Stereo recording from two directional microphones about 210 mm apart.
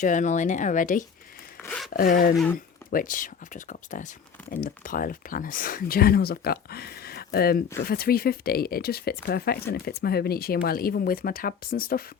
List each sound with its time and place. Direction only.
0.0 s speech: 35° left (ahead or behind)
1.6 s zipper: 5° left (ahead or behind)
1.9 s speech: 40° left (ahead or behind)